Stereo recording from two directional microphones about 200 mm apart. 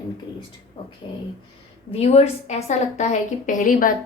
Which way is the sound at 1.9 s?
30° left (ahead or behind).